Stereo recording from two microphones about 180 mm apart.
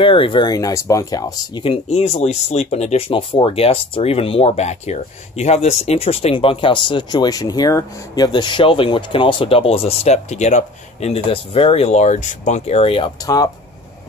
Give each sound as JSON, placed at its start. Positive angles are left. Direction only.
{"t": 0.0, "sound": "speech", "side_deg": 30}